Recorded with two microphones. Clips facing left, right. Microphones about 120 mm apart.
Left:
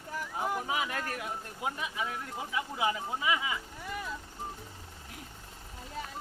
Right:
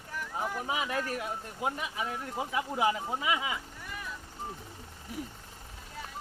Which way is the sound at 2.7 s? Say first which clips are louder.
Right 3 dB; 35° right (ahead or behind).